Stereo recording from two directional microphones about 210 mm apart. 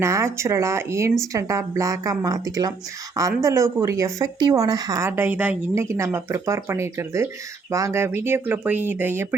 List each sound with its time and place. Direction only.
0.0 s speech: 15° right (ahead or behind)